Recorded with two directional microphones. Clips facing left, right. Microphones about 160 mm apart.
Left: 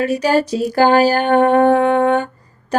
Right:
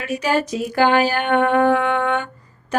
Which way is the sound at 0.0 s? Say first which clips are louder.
Left 5 dB; 35° left (ahead or behind).